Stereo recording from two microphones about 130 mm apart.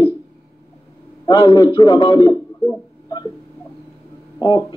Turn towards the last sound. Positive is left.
turn(degrees=30)  # may be behind; listen again after turning